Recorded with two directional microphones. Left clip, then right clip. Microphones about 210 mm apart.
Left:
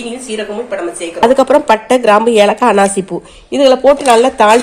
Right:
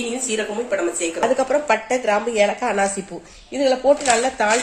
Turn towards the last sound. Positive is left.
turn(degrees=40)  # may be behind; listen again after turning